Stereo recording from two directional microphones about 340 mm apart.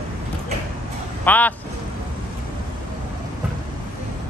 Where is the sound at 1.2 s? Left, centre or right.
Centre.